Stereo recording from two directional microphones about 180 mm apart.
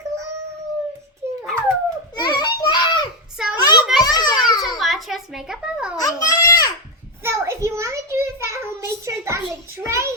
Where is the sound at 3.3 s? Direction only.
5° right (ahead or behind).